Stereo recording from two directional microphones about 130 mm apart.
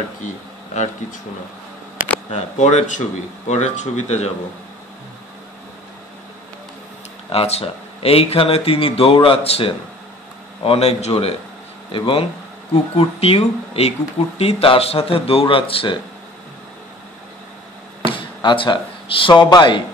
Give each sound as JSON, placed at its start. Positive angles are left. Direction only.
{"t": 2.3, "sound": "speech", "side_deg": 60}
{"t": 7.2, "sound": "speech", "side_deg": 50}
{"t": 18.0, "sound": "speech", "side_deg": 40}